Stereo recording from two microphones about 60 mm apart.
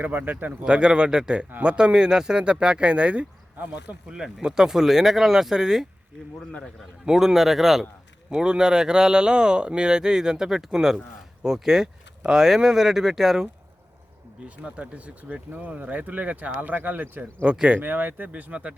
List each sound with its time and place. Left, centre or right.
0.0 s speech: right
0.6 s speech: centre
4.1 s speech: centre
7.0 s speech: centre
14.4 s speech: right
17.4 s speech: centre
17.8 s speech: right